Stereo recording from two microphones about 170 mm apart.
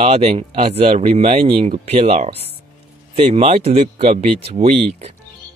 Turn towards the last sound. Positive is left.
turn(degrees=-35)  # may be behind; listen again after turning